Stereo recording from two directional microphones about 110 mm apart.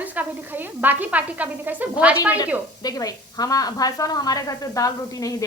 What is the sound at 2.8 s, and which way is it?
A woman's voice, 35° left (ahead or behind).